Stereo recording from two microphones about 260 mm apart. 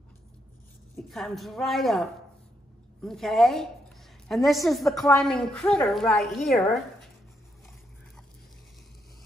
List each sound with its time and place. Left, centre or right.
0.9 s a woman's voice: centre